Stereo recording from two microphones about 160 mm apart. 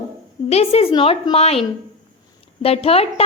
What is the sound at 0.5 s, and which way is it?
A woman's voice, 40° left (ahead or behind).